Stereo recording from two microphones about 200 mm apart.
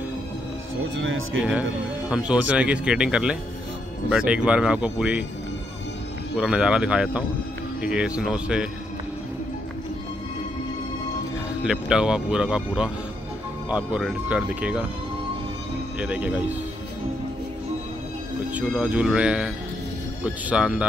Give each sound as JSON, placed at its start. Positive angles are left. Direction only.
{"t": 0.9, "sound": "speech", "side_deg": -80}
{"t": 2.0, "sound": "speech", "side_deg": -5}
{"t": 6.3, "sound": "speech", "side_deg": -5}
{"t": 11.6, "sound": "speech", "side_deg": -5}
{"t": 16.0, "sound": "speech", "side_deg": -5}
{"t": 18.5, "sound": "speech", "side_deg": -5}